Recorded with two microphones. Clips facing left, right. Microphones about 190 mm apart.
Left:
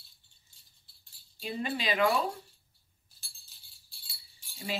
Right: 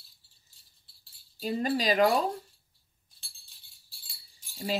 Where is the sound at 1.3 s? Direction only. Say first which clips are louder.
Right 6 dB; 40° right (ahead or behind).